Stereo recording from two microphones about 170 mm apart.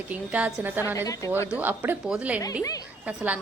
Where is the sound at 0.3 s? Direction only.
10° right (ahead or behind).